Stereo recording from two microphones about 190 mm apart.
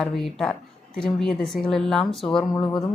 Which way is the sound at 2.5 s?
20° left (ahead or behind).